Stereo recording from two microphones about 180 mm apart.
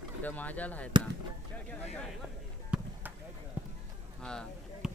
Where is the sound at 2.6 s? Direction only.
5° right (ahead or behind).